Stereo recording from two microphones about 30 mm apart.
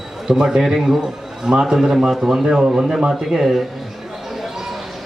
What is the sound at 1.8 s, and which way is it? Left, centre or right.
Speech, centre.